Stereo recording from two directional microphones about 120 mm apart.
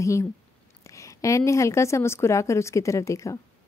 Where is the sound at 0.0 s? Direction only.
25° left (ahead or behind).